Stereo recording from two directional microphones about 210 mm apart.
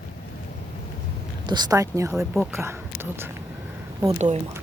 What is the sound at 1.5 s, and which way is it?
Speech, 20° right (ahead or behind).